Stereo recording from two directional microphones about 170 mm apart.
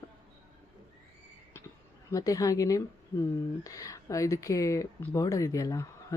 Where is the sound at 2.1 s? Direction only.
20° left (ahead or behind).